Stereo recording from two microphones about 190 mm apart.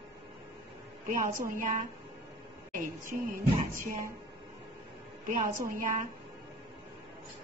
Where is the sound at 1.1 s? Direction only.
45° right (ahead or behind).